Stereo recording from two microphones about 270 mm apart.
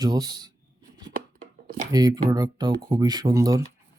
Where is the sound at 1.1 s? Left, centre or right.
Right.